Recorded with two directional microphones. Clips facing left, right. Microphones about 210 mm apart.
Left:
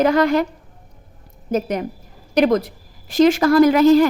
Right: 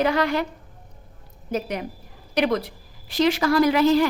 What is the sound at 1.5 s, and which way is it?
A woman's voice, 45° left (ahead or behind).